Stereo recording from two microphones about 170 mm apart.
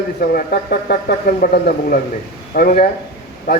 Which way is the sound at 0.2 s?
65° left (ahead or behind).